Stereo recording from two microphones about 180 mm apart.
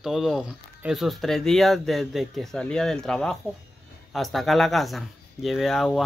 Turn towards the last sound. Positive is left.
turn(degrees=0)  # may be behind; listen again after turning